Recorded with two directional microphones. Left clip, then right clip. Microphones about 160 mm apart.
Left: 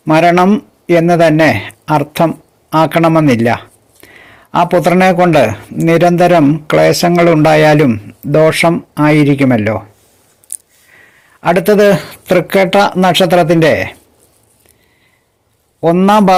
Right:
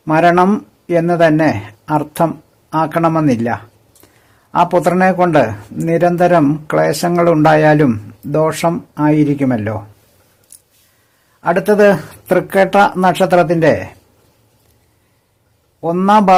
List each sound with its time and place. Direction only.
0.1 s speech: 15° left (ahead or behind)
11.3 s speech: 20° left (ahead or behind)
15.8 s speech: 20° left (ahead or behind)